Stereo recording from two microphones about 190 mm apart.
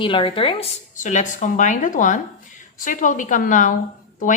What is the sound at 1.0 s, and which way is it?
A woman's voice, 40° left (ahead or behind).